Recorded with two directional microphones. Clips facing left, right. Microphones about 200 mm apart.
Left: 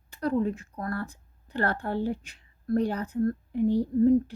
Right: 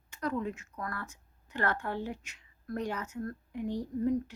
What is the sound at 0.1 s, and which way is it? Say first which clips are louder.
A woman's voice: left 7 dB; 35° left (ahead or behind).